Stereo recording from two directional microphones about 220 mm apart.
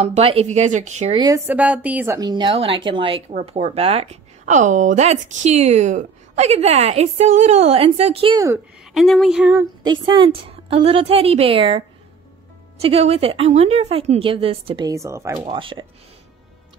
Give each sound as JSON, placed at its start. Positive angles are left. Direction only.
{"t": 0.0, "sound": "speech", "side_deg": -30}
{"t": 1.4, "sound": "a woman's voice", "side_deg": -5}
{"t": 8.9, "sound": "speech", "side_deg": 0}
{"t": 9.8, "sound": "a woman's voice", "side_deg": -20}
{"t": 12.8, "sound": "a woman's voice", "side_deg": -25}